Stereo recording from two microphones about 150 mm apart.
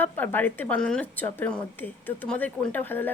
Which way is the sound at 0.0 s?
10° left (ahead or behind).